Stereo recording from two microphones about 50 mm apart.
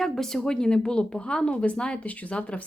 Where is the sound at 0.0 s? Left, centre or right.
Centre.